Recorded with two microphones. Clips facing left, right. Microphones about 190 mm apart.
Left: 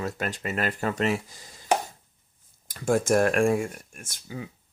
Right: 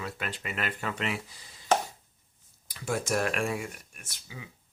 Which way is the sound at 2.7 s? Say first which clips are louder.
Left 8 dB; 45° left (ahead or behind).